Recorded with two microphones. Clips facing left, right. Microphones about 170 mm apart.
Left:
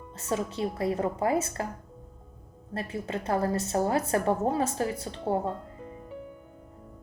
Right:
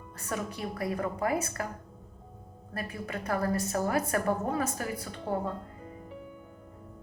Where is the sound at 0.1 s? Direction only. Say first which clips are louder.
Left 5 dB; 25° left (ahead or behind).